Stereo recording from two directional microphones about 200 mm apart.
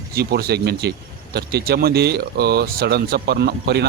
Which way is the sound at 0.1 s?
50° right (ahead or behind).